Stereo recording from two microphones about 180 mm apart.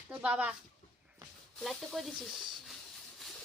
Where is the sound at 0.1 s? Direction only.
10° right (ahead or behind).